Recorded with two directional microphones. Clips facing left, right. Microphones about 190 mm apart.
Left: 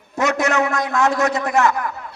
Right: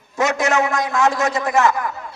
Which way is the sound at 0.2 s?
60° left (ahead or behind).